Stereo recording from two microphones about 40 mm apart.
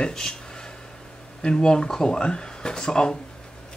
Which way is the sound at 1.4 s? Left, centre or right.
Centre.